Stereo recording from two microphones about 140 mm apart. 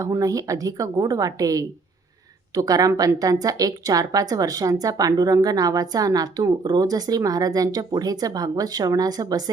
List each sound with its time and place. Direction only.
0.0 s a woman's voice: 25° right (ahead or behind)